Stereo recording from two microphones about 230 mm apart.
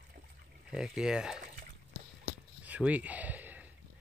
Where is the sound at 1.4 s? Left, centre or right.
Right.